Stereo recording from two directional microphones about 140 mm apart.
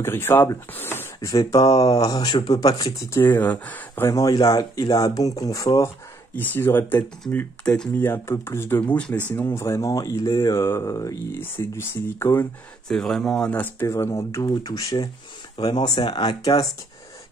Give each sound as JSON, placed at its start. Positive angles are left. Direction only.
{"t": 0.0, "sound": "speech", "side_deg": 15}
{"t": 1.3, "sound": "speech", "side_deg": 25}
{"t": 1.6, "sound": "speech", "side_deg": 45}
{"t": 1.9, "sound": "speech", "side_deg": 25}
{"t": 3.3, "sound": "speech", "side_deg": 10}
{"t": 6.3, "sound": "speech", "side_deg": 15}
{"t": 12.8, "sound": "speech", "side_deg": 5}